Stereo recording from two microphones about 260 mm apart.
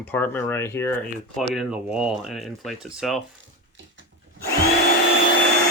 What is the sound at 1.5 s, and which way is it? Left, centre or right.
Speech, centre.